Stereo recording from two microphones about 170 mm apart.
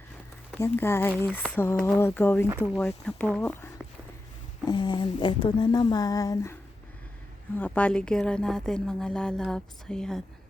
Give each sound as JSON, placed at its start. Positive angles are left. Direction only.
{"t": 0.5, "sound": "speech", "side_deg": 15}
{"t": 4.6, "sound": "speech", "side_deg": 25}
{"t": 7.6, "sound": "a woman's voice", "side_deg": 10}